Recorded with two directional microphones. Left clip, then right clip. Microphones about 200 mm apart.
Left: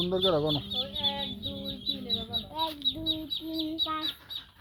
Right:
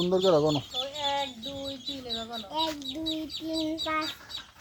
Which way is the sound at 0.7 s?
40° left (ahead or behind).